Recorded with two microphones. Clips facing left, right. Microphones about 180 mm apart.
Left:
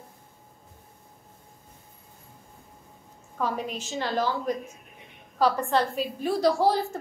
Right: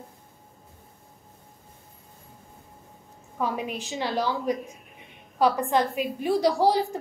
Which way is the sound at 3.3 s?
10° right (ahead or behind).